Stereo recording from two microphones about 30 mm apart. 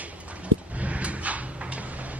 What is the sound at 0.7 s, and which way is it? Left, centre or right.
Dog, right.